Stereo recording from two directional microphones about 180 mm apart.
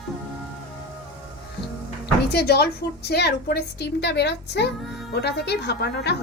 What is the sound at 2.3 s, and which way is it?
A woman's voice, 65° left (ahead or behind).